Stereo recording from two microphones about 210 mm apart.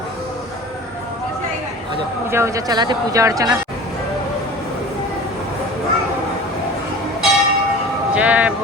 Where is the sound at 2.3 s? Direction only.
15° right (ahead or behind).